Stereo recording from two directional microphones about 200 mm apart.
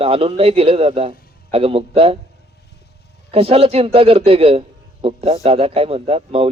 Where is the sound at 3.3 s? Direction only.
30° right (ahead or behind).